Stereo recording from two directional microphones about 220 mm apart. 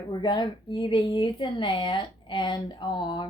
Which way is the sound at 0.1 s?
20° left (ahead or behind).